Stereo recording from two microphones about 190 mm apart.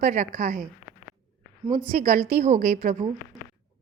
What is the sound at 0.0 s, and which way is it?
Speech, 40° right (ahead or behind).